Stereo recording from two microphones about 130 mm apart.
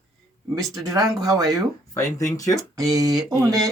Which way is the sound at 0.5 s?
25° right (ahead or behind).